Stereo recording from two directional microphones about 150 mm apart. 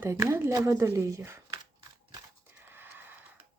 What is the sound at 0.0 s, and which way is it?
Speech, 20° right (ahead or behind).